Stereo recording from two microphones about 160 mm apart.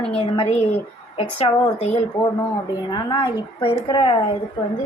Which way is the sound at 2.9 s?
30° left (ahead or behind).